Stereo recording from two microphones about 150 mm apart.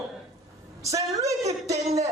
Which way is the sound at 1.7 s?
45° right (ahead or behind).